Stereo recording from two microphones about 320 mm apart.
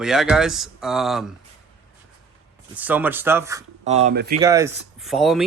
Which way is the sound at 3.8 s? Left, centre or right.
Right.